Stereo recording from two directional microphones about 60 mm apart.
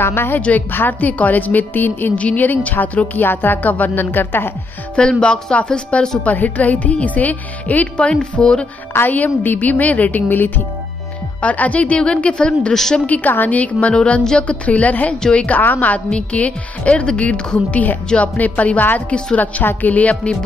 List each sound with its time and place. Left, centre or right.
0.0 s a woman's voice: left
4.9 s a woman's voice: centre
8.9 s a woman's voice: left
12.7 s a woman's voice: centre
13.0 s a woman's voice: left
14.7 s a woman's voice: left